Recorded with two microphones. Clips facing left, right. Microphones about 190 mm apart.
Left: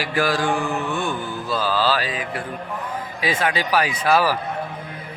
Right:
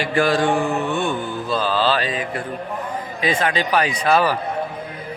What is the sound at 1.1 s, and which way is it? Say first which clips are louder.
Mantra: right 3 dB; 20° right (ahead or behind).